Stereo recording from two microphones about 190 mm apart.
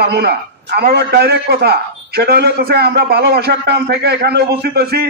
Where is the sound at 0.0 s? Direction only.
60° right (ahead or behind).